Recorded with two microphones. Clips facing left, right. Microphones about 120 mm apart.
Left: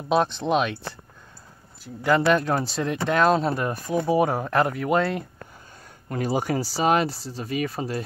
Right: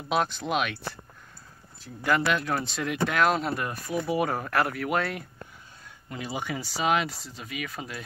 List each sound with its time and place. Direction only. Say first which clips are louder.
0.1 s speech: left 5 dB; 30° left (ahead or behind)
2.3 s speech: left 6 dB; 35° left (ahead or behind)
4.3 s speech: left 4 dB; 25° left (ahead or behind)
6.0 s speech: left 8 dB; 45° left (ahead or behind)